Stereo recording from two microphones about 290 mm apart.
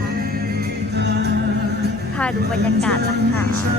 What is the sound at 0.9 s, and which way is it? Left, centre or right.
Music, right.